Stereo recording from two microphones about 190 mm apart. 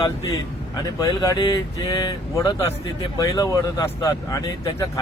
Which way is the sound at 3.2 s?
20° left (ahead or behind).